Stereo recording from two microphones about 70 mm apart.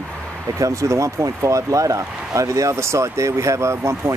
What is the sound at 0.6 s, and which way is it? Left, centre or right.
Speech, right.